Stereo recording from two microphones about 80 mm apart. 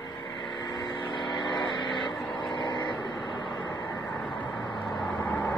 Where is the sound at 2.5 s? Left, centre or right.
Left.